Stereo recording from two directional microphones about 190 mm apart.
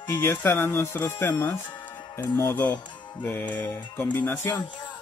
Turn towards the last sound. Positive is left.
turn(degrees=25)  # may be behind; listen again after turning